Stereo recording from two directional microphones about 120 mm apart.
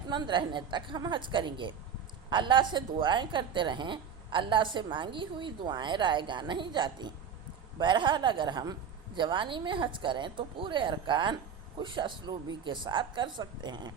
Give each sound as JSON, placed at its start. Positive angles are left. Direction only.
{"t": 0.1, "sound": "a woman's voice", "side_deg": -40}